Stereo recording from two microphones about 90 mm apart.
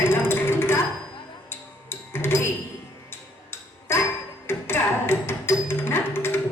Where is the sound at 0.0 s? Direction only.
25° left (ahead or behind).